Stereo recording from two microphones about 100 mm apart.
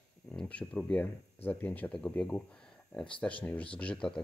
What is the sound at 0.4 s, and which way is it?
Speech, 10° left (ahead or behind).